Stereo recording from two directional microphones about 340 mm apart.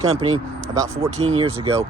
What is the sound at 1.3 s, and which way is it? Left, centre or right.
Speech, centre.